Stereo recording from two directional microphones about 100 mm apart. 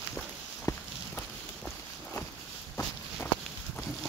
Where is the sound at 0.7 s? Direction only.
35° left (ahead or behind).